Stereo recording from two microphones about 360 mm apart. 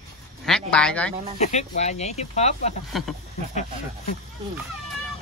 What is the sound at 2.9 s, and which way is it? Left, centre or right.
Speech, centre.